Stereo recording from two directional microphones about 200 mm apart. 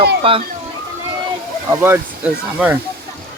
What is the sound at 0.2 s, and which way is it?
Speech, 25° right (ahead or behind).